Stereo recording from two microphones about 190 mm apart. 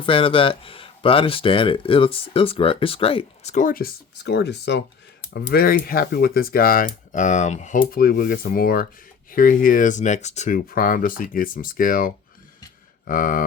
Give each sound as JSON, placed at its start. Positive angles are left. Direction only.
{"t": 0.0, "sound": "speech", "side_deg": 30}